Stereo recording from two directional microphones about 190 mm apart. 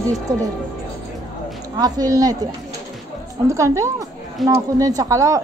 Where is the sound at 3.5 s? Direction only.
15° right (ahead or behind).